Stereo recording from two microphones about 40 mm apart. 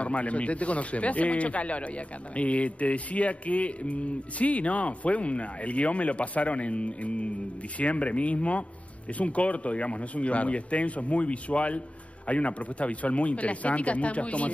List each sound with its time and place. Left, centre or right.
0.0 s speech: left